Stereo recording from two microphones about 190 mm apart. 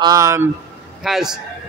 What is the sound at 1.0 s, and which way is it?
Speech, centre (ahead or behind).